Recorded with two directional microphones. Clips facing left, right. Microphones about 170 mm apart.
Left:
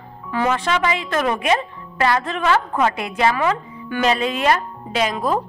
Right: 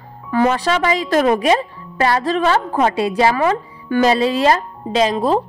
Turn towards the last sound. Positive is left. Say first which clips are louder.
# right 5 dB
turn(degrees=-30)  # may be behind; listen again after turning